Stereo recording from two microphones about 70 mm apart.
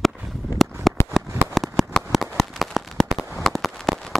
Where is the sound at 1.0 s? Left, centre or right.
Left.